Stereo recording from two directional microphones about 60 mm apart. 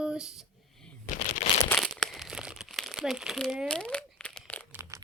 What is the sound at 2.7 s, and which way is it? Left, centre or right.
Crumpling, centre.